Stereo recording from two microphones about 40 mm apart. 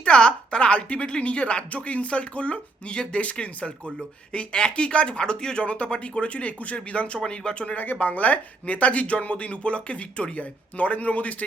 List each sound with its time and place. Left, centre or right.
0.0 s speech: left
4.3 s speech: left
5.6 s speech: left
7.8 s speech: left